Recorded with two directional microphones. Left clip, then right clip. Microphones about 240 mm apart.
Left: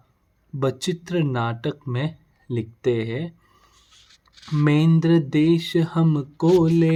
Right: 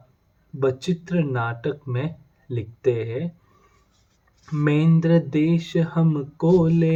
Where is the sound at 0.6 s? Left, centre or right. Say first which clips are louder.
Right 1 dB; left.